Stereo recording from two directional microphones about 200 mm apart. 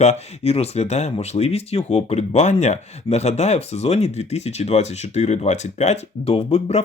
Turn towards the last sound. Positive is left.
turn(degrees=35)  # may be behind; listen again after turning